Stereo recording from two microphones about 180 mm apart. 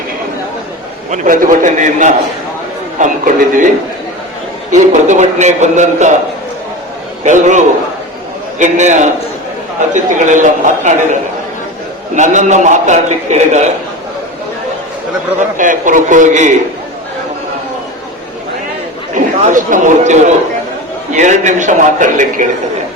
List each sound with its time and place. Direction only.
1.1 s a man's voice: 45° right (ahead or behind)
4.7 s a man's voice: 40° right (ahead or behind)
7.3 s a man's voice: 45° right (ahead or behind)
15.4 s a man's voice: 45° right (ahead or behind)
19.1 s a man's voice: 45° right (ahead or behind)